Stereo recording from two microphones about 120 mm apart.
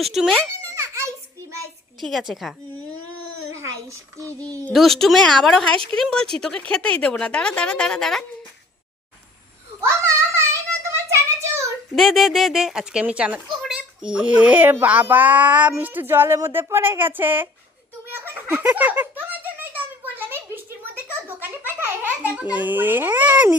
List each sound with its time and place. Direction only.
0.0 s speech: centre (ahead or behind)
2.0 s speech: centre (ahead or behind)
4.3 s speech: 10° left (ahead or behind)
4.7 s speech: centre (ahead or behind)
5.7 s speech: 45° right (ahead or behind)
6.0 s speech: 5° left (ahead or behind)
10.1 s child singing: 25° right (ahead or behind)
11.9 s a child's voice: centre (ahead or behind); by 17.5 s 15° right (ahead or behind)
18.1 s baby laughter: 20° right (ahead or behind)
20.8 s a sound: 15° right (ahead or behind)